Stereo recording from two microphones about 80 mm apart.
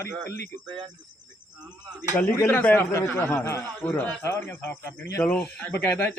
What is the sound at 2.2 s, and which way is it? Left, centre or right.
A man's voice, left.